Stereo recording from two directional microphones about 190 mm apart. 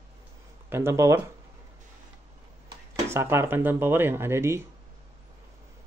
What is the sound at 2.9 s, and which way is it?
Speech, 15° right (ahead or behind).